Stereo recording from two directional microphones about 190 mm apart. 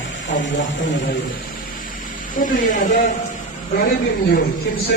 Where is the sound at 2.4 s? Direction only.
45° left (ahead or behind).